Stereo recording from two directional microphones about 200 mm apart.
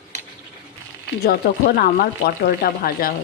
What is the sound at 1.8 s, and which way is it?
Speech, 50° left (ahead or behind).